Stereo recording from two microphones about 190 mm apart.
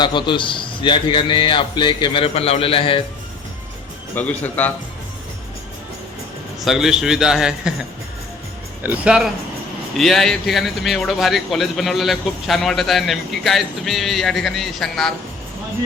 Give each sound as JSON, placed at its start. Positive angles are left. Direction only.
{"t": 0.0, "sound": "a man's voice", "side_deg": 25}
{"t": 4.1, "sound": "a man's voice", "side_deg": 10}
{"t": 6.7, "sound": "a man's voice", "side_deg": 0}